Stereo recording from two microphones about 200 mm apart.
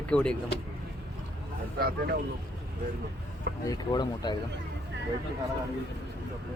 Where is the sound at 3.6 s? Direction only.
20° left (ahead or behind).